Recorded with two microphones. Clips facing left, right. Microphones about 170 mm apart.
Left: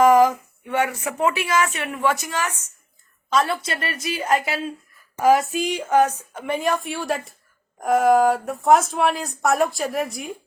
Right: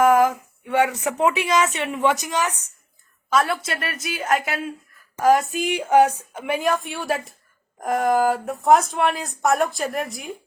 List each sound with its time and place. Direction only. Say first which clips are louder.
0.0 s speech: left 2 dB; 5° right (ahead or behind)
3.2 s speech: even; 5° right (ahead or behind)
5.1 s speech: even; 10° left (ahead or behind)
5.4 s speech: even; centre (ahead or behind)